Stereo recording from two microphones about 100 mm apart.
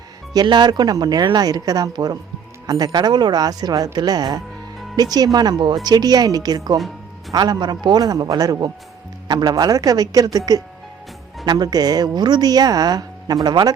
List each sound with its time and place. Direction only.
0.4 s a woman's voice: 45° right (ahead or behind)
6.7 s music: centre (ahead or behind)
7.3 s a woman's voice: 45° right (ahead or behind)